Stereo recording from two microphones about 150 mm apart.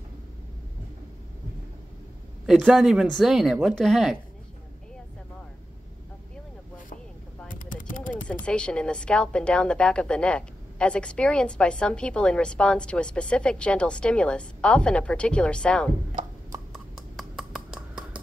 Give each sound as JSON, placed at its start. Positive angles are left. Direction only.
{"t": 2.4, "sound": "speech", "side_deg": -5}
{"t": 7.4, "sound": "mechanisms", "side_deg": 60}
{"t": 8.5, "sound": "a woman's voice", "side_deg": 5}
{"t": 16.7, "sound": "a sound", "side_deg": 0}